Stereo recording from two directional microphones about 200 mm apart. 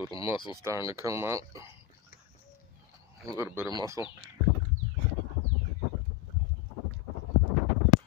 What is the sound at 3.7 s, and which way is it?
Speech, 15° right (ahead or behind).